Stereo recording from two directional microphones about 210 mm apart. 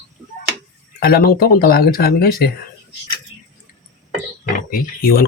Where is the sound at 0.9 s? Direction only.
45° left (ahead or behind).